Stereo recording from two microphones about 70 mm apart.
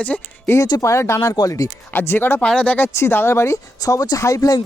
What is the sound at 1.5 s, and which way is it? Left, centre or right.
Speech, left.